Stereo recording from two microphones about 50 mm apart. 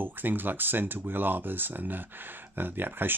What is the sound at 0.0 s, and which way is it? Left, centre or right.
Speech, right.